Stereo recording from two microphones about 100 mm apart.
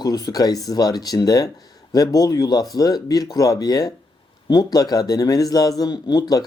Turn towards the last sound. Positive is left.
turn(degrees=40)  # may be behind; listen again after turning